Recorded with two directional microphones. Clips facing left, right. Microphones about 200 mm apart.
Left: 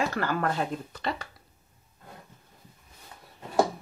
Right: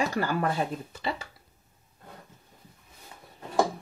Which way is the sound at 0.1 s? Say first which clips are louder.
Right 1 dB; 10° right (ahead or behind).